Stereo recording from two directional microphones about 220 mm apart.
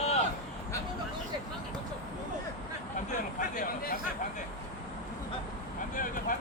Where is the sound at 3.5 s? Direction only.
40° left (ahead or behind).